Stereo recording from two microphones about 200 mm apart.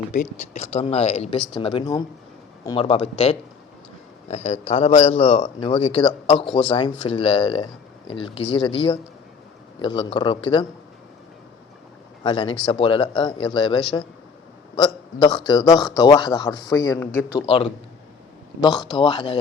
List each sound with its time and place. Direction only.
0.1 s a man's voice: 35° left (ahead or behind)
12.2 s a man's voice: 25° left (ahead or behind)
17.4 s a man's voice: 30° left (ahead or behind)
18.9 s a man's voice: 20° left (ahead or behind)